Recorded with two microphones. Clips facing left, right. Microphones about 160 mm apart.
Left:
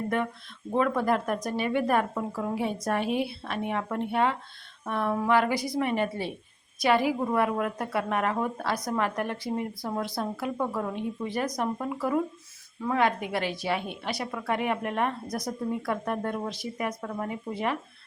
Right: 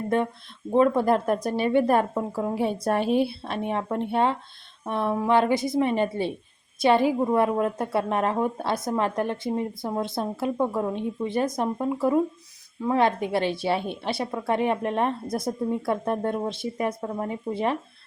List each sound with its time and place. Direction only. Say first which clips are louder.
0.7 s a woman's voice: right 5 dB; 25° right (ahead or behind)